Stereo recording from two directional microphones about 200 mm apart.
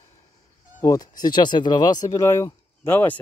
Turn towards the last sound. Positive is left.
turn(degrees=10)  # may be behind; listen again after turning